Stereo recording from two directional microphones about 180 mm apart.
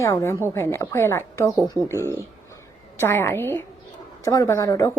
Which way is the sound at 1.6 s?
20° right (ahead or behind).